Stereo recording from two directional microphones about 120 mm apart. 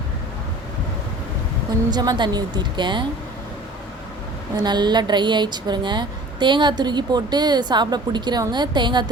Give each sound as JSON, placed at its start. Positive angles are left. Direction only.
{"t": 1.9, "sound": "speech", "side_deg": -35}
{"t": 4.5, "sound": "speech", "side_deg": -35}